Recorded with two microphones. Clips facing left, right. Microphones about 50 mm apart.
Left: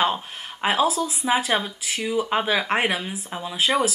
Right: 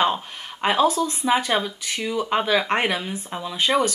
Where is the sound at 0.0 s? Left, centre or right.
Centre.